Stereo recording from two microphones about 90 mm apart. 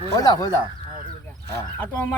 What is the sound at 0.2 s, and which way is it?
Speech, 40° left (ahead or behind).